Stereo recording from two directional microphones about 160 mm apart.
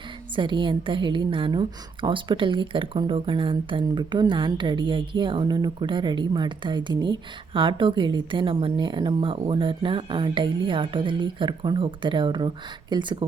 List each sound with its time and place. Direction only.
0.3 s a woman's voice: 30° right (ahead or behind)